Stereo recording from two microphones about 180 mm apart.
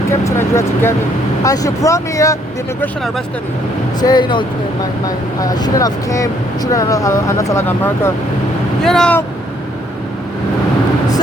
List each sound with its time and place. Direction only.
0.1 s speech: 15° left (ahead or behind)
4.0 s speech: 25° left (ahead or behind)
8.8 s speech: 5° left (ahead or behind)